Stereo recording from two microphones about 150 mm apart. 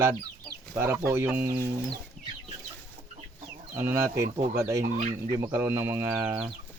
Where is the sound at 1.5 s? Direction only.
25° right (ahead or behind).